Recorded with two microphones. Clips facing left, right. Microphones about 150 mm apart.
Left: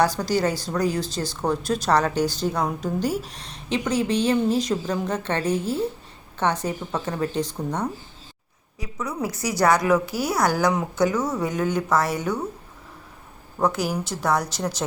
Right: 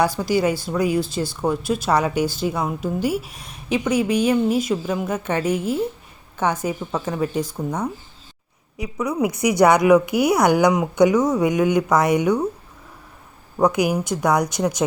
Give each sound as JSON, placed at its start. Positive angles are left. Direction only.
{"t": 0.2, "sound": "speech", "side_deg": -10}
{"t": 13.6, "sound": "speech", "side_deg": -15}